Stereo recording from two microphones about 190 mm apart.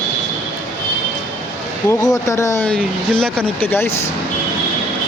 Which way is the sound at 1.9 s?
15° left (ahead or behind).